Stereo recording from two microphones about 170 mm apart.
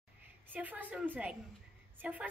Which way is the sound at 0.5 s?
10° right (ahead or behind).